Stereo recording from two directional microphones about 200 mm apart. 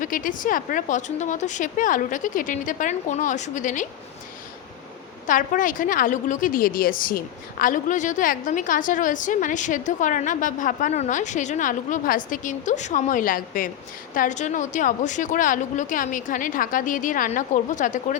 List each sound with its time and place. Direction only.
0.0 s a woman's voice: 45° left (ahead or behind)
5.2 s a woman's voice: 40° left (ahead or behind)